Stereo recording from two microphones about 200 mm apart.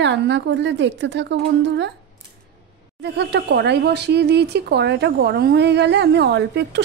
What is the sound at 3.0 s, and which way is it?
Speech, 55° right (ahead or behind).